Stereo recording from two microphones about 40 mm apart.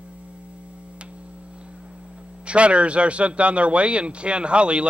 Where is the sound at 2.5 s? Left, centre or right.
Right.